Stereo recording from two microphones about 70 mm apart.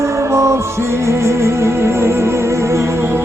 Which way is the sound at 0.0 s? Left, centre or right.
Right.